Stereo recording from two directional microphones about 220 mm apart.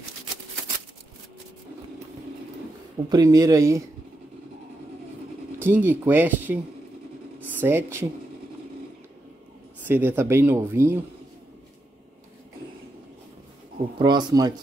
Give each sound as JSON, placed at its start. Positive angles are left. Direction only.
{"t": 3.1, "sound": "speech", "side_deg": -15}
{"t": 5.6, "sound": "speech", "side_deg": -10}
{"t": 7.6, "sound": "speech", "side_deg": -10}
{"t": 9.8, "sound": "speech", "side_deg": -10}
{"t": 13.9, "sound": "speech", "side_deg": -20}